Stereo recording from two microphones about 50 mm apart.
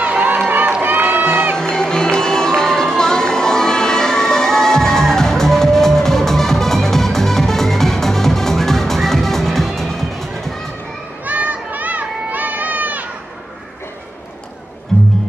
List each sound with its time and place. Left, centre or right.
0.0 s run: right
0.8 s crowd: right
1.2 s music: right
1.6 s music: centre
11.2 s a sound: right